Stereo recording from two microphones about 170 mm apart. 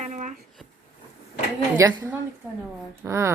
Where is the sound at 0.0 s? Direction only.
45° right (ahead or behind).